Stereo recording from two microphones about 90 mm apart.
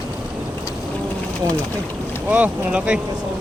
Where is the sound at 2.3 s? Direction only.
15° right (ahead or behind).